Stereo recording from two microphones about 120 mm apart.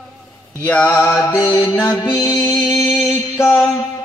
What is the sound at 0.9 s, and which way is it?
Music, 25° left (ahead or behind).